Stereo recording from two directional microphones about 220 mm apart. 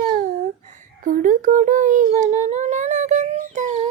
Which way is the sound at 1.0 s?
35° right (ahead or behind).